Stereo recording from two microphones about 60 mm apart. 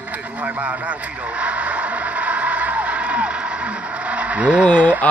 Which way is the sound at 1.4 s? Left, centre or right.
Right.